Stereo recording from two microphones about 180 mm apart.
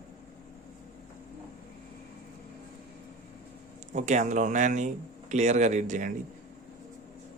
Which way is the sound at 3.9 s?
40° right (ahead or behind).